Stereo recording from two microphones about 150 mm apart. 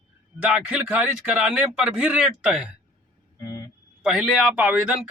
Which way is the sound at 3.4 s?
25° left (ahead or behind).